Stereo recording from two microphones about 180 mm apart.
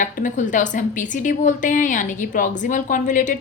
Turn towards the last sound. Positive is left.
turn(degrees=45)  # may be behind; listen again after turning